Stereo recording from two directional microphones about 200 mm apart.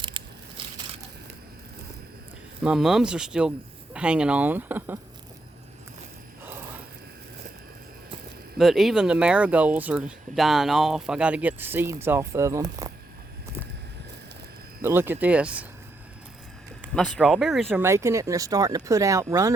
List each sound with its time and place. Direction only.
0.0 s crushing: 25° right (ahead or behind)
2.6 s speech: centre (ahead or behind)
6.4 s a sound: 10° right (ahead or behind)
8.5 s speech: centre (ahead or behind); by 12.9 s 15° right (ahead or behind)
14.8 s speech: 10° right (ahead or behind)
16.9 s speech: centre (ahead or behind); by 19.5 s 15° right (ahead or behind)